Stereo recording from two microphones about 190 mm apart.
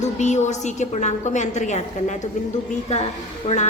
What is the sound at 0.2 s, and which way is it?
A woman's voice, 40° left (ahead or behind).